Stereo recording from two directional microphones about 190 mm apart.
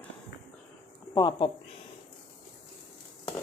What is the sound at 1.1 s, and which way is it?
Speech, 25° left (ahead or behind).